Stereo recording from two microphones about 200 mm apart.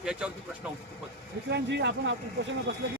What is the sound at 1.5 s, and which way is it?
Speech, 60° right (ahead or behind).